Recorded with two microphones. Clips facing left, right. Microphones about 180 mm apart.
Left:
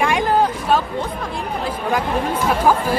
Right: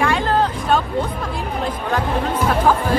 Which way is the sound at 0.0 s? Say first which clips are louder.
Left 1 dB; 15° left (ahead or behind).